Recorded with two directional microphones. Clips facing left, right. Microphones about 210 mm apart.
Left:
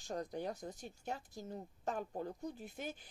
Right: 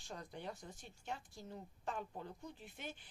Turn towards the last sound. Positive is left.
turn(degrees=40)  # may be behind; listen again after turning